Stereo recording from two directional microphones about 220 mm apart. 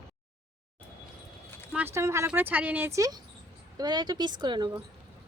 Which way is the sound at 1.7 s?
10° right (ahead or behind).